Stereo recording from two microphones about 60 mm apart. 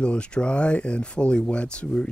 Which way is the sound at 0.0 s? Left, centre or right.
Centre.